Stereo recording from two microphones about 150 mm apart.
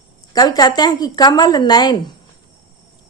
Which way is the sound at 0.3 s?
25° left (ahead or behind).